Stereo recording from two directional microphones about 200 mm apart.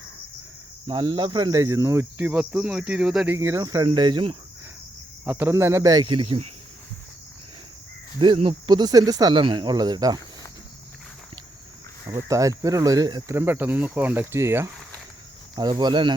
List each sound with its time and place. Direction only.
0.9 s speech: 25° right (ahead or behind); by 3.3 s 5° right (ahead or behind)
3.3 s speech: 15° right (ahead or behind)
5.2 s speech: 10° right (ahead or behind); by 6.4 s 30° right (ahead or behind)
8.2 s speech: 25° right (ahead or behind)
12.0 s speech: 15° right (ahead or behind)